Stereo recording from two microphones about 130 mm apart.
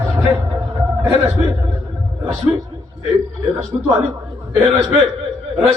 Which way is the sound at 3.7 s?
30° right (ahead or behind).